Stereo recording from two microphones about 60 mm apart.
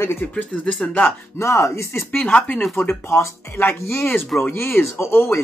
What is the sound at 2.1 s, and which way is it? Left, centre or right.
Speech, left.